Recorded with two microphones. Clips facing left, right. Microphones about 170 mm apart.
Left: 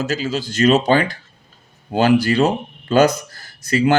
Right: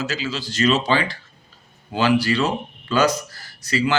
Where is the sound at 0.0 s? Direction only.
45° left (ahead or behind).